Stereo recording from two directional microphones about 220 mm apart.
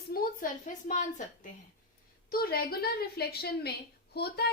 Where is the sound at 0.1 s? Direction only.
45° left (ahead or behind).